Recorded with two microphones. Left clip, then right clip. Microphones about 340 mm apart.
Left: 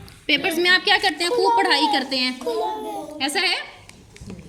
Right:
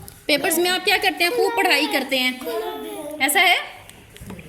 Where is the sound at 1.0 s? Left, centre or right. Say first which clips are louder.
Right 1 dB; centre.